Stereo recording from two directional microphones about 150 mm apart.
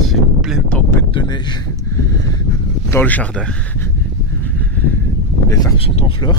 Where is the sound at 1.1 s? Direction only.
30° left (ahead or behind).